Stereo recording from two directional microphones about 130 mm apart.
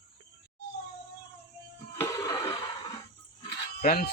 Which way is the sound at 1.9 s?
20° left (ahead or behind).